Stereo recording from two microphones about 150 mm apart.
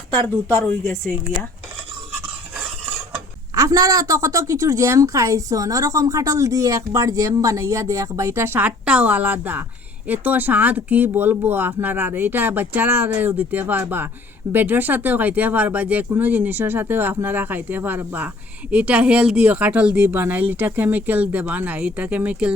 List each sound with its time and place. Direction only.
0.4 s speech: 15° left (ahead or behind)
3.5 s a woman's voice: 20° right (ahead or behind)